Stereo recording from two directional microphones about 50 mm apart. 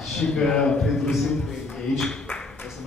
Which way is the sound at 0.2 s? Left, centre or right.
Centre.